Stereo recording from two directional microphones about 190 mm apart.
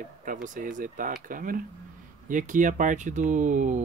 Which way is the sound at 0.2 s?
45° right (ahead or behind).